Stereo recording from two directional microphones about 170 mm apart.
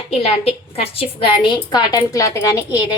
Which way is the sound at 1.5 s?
25° left (ahead or behind).